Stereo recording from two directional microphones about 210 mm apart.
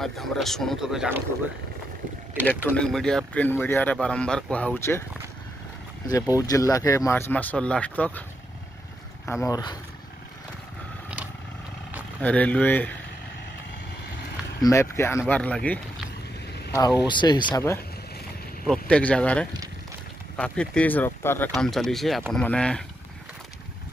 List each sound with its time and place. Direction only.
0.0 s speech: centre (ahead or behind)
2.7 s speech: 5° left (ahead or behind)
6.0 s speech: 15° left (ahead or behind)
9.2 s speech: 15° left (ahead or behind)
12.2 s speech: 5° left (ahead or behind)
14.6 s speech: 15° left (ahead or behind)
17.1 s speech: 20° left (ahead or behind)
18.7 s speech: 5° left (ahead or behind)